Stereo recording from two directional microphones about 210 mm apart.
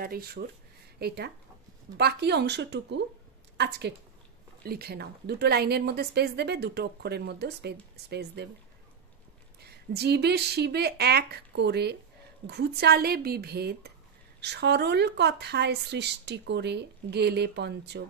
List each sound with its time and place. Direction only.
0.0 s speech: 45° right (ahead or behind)
9.6 s speech: 50° right (ahead or behind)